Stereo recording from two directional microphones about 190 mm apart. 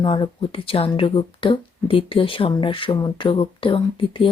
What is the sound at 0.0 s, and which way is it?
Speech, 25° left (ahead or behind).